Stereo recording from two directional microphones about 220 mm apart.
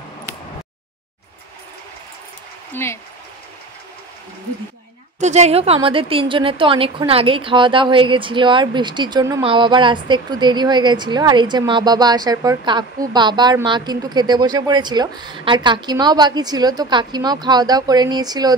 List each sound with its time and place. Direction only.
2.7 s speech: 10° left (ahead or behind)
5.2 s a woman's voice: 30° right (ahead or behind)